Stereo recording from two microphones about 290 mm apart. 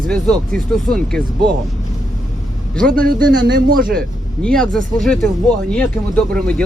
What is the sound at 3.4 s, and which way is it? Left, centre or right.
Speech, right.